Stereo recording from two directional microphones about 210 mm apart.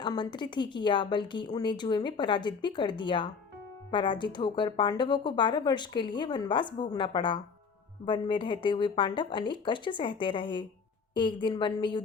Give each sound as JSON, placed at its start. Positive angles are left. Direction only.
{"t": 0.0, "sound": "a woman's voice", "side_deg": 20}